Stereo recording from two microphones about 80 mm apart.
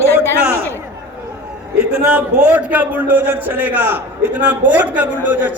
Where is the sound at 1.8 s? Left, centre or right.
Centre.